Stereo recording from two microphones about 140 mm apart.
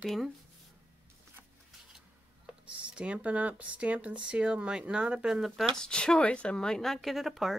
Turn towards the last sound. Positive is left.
turn(degrees=0)  # may be behind; listen again after turning